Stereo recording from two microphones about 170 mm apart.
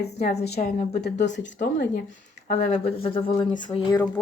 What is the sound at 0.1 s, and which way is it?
Speech, 40° left (ahead or behind).